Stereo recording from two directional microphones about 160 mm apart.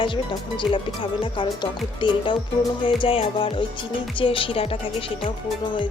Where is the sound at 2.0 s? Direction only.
30° left (ahead or behind).